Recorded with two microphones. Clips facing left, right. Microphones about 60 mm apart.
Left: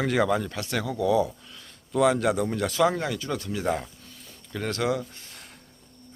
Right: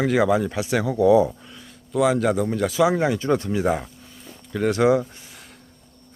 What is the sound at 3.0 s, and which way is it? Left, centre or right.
Speech, right.